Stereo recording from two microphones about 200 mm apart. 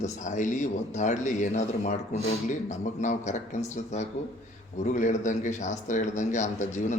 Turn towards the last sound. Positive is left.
turn(degrees=35)  # may be behind; listen again after turning